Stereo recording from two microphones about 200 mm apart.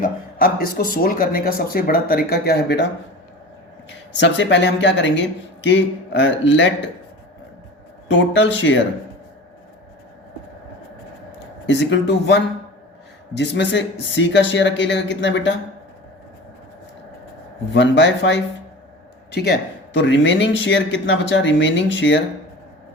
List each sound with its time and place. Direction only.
0.0 s speech: 45° left (ahead or behind)
3.8 s speech: 60° left (ahead or behind)
8.1 s speech: 65° left (ahead or behind)
11.6 s speech: 65° left (ahead or behind)
17.7 s speech: 60° left (ahead or behind)